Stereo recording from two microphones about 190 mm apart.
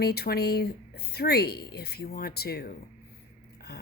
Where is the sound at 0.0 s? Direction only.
55° left (ahead or behind).